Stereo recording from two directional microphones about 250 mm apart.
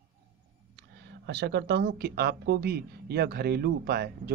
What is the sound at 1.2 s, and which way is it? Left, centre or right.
Speech, right.